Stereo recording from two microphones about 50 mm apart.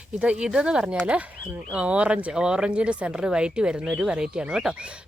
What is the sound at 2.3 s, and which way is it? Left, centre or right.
Speech, centre.